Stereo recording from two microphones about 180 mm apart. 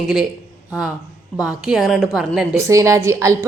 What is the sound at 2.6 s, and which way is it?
Speech, 15° right (ahead or behind).